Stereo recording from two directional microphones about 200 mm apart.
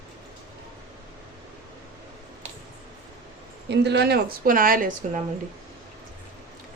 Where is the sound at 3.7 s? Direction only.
55° right (ahead or behind).